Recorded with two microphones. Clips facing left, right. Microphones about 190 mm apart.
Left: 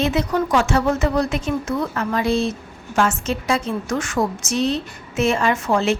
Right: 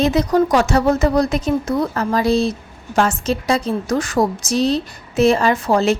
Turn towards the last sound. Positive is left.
turn(degrees=-40)  # may be behind; listen again after turning